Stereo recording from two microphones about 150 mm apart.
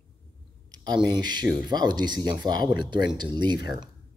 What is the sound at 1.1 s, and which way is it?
Speech, 30° right (ahead or behind).